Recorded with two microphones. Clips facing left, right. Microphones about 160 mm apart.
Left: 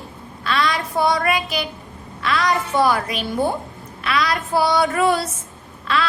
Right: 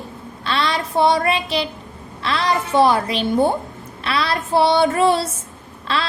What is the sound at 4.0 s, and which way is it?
Child singing, 30° right (ahead or behind).